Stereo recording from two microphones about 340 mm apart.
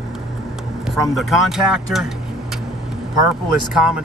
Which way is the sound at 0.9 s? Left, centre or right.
Centre.